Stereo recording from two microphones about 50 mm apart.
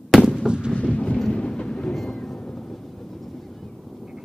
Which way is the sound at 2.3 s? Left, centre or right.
Centre.